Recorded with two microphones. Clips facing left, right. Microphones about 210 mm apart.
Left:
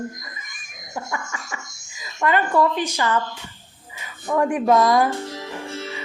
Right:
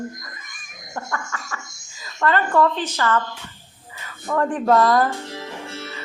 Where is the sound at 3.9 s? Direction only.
15° left (ahead or behind).